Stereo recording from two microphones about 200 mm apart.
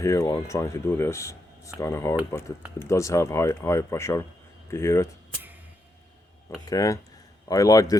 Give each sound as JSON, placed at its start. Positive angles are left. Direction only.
{"t": 0.0, "sound": "speech", "side_deg": 15}
{"t": 6.7, "sound": "speech", "side_deg": 15}